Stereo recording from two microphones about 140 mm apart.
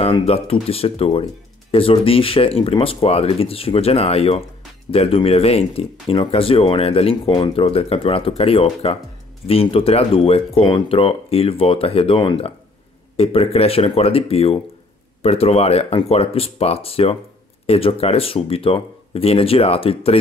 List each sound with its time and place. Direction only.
0.0 s speech: 45° left (ahead or behind)